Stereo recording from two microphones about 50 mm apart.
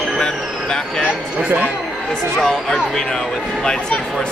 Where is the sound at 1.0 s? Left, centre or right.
Right.